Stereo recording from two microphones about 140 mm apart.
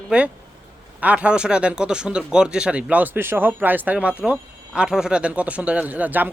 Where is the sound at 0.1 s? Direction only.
5° right (ahead or behind).